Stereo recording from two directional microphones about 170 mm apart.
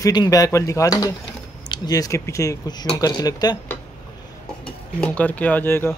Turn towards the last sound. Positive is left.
turn(degrees=15)  # may be behind; listen again after turning